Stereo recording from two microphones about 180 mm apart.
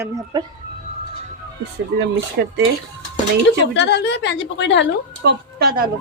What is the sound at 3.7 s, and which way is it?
A woman's voice, 75° left (ahead or behind).